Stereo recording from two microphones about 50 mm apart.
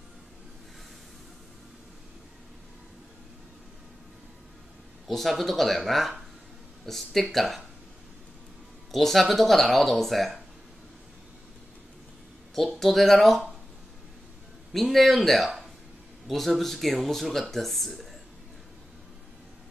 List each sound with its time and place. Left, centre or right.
5.0 s speech: centre
8.9 s speech: centre
12.5 s speech: centre
14.7 s speech: centre